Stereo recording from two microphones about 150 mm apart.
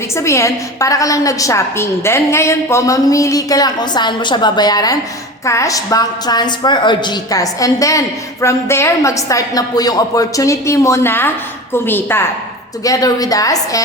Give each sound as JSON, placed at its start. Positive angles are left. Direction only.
{"t": 0.2, "sound": "a woman's voice", "side_deg": 20}